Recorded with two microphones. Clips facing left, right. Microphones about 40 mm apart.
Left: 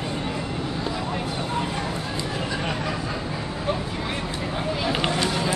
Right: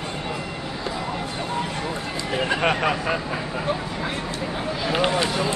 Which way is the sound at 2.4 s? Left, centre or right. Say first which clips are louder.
Right 6 dB; right.